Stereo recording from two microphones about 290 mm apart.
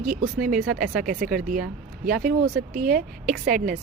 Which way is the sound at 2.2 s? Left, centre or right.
Right.